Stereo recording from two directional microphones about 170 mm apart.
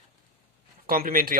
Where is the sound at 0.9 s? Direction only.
55° right (ahead or behind).